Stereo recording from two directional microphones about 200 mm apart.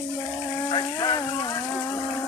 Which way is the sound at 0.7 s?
20° left (ahead or behind).